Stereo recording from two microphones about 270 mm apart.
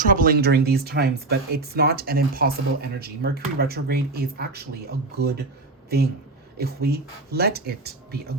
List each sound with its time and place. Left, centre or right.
0.0 s speech: right
6.6 s speech: right